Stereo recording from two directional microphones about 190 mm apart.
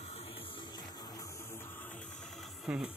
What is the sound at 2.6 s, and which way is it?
Music, 5° right (ahead or behind).